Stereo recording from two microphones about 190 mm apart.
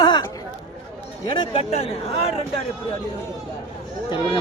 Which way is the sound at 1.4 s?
30° left (ahead or behind).